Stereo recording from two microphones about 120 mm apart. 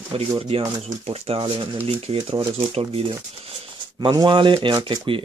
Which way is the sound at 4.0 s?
35° right (ahead or behind).